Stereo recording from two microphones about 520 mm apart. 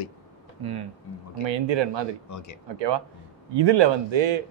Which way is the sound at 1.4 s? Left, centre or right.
Right.